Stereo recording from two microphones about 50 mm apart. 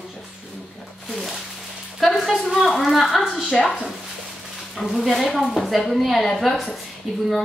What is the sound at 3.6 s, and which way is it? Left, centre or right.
Speech, centre.